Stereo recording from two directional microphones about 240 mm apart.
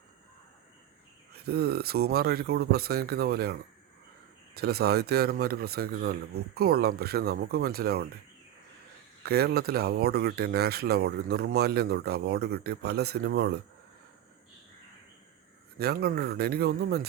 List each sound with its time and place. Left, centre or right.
1.5 s speech: right
9.2 s speech: right
15.8 s speech: right